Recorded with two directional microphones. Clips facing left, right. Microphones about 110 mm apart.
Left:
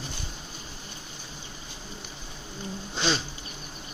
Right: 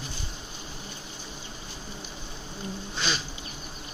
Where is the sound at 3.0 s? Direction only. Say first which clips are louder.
Left 4 dB; 30° left (ahead or behind).